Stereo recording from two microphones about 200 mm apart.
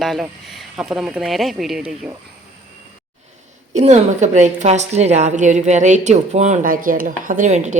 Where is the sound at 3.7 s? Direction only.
35° right (ahead or behind).